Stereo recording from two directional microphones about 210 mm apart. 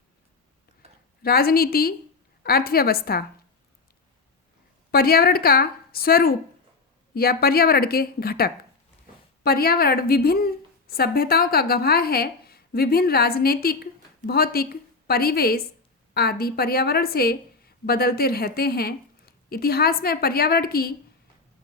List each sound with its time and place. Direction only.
1.2 s a woman's voice: 45° left (ahead or behind)
4.9 s a woman's voice: 45° left (ahead or behind)